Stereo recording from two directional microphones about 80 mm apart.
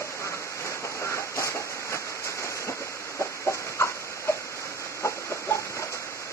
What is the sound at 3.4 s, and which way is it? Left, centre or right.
Chicken, left.